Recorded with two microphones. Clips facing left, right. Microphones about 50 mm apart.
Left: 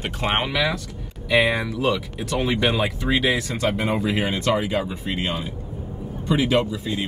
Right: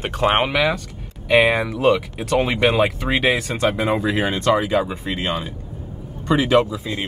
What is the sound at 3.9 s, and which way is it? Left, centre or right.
Speech, right.